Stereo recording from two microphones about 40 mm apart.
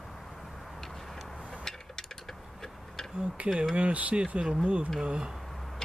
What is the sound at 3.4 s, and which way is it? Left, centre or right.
Speech, right.